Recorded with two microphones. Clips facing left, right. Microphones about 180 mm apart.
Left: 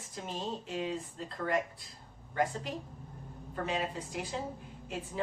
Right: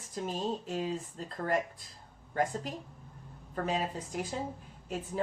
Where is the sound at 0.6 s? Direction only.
40° right (ahead or behind).